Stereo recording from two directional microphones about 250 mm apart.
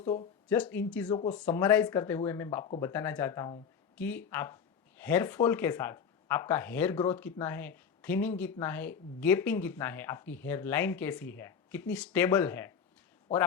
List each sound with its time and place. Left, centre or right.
0.4 s speech: centre